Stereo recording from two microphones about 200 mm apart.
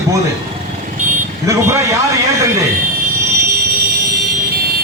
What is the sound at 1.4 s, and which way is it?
Speech, 15° right (ahead or behind).